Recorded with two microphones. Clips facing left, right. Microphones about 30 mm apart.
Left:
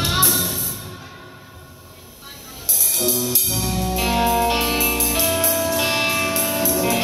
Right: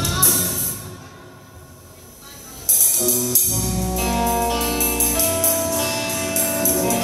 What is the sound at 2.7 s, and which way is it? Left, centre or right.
Music, left.